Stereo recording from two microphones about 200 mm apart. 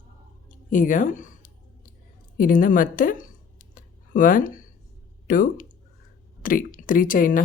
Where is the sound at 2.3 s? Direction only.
45° left (ahead or behind).